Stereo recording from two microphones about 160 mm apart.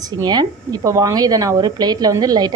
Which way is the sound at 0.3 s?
25° right (ahead or behind).